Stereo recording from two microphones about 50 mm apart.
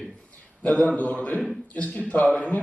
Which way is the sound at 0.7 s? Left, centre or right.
Left.